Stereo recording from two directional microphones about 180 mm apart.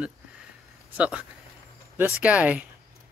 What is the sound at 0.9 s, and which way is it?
Speech, 5° right (ahead or behind).